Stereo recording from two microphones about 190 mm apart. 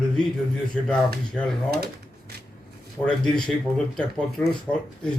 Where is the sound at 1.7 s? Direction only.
55° right (ahead or behind).